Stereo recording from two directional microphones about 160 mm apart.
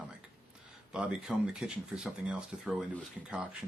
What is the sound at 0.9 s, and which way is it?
Speech, 5° right (ahead or behind).